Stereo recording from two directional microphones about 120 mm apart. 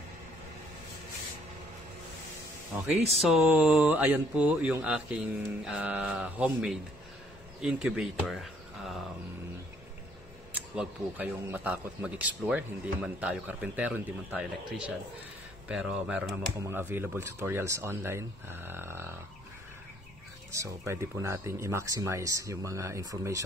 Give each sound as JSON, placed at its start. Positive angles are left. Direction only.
{"t": 2.7, "sound": "speech", "side_deg": -15}
{"t": 3.1, "sound": "speech", "side_deg": -5}
{"t": 7.6, "sound": "speech", "side_deg": -5}
{"t": 10.5, "sound": "speech", "side_deg": -15}
{"t": 15.7, "sound": "speech", "side_deg": -5}
{"t": 20.5, "sound": "speech", "side_deg": -25}